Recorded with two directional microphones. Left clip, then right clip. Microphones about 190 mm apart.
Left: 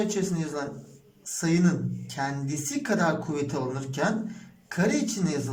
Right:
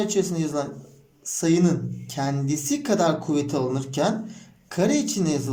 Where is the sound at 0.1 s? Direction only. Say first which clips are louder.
Right 6 dB; 20° right (ahead or behind).